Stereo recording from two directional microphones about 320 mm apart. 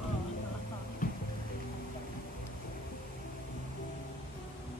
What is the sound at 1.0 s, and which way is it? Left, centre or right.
Music, left.